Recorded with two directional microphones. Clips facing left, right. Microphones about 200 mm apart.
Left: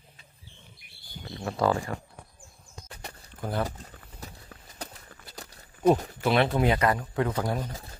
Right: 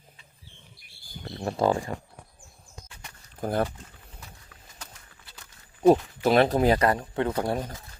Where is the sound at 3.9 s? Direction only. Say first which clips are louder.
Left 4 dB; 40° left (ahead or behind).